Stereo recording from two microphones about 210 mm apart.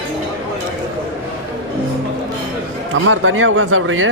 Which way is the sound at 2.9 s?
70° right (ahead or behind).